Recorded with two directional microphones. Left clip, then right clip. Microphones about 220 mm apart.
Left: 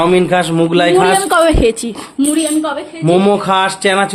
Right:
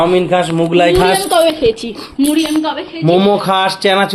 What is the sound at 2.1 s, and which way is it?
Speech, 15° left (ahead or behind).